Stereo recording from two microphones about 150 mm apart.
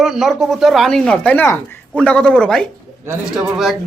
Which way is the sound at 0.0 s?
Centre (ahead or behind).